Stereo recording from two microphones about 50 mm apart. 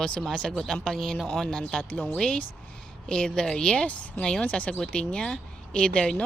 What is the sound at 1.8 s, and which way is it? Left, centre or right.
Speech, left.